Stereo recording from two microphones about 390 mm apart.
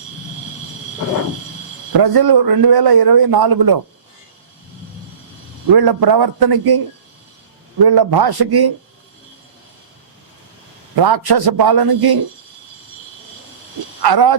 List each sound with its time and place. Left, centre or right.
2.0 s a man's voice: right
5.7 s a man's voice: right
10.9 s a man's voice: right
14.0 s a man's voice: right